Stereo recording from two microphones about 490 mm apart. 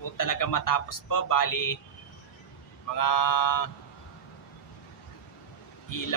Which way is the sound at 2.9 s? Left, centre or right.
Left.